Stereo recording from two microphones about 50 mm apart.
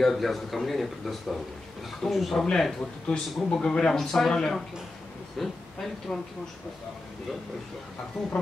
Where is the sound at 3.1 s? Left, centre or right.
Centre.